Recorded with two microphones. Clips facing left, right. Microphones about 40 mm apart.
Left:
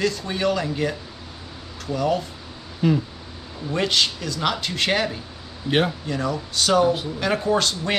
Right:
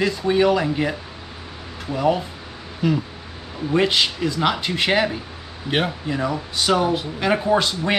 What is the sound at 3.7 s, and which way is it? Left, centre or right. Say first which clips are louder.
A man's voice: right 3 dB; centre.